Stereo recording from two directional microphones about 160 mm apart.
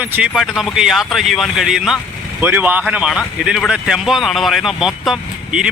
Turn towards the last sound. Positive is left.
turn(degrees=-5)  # may be behind; listen again after turning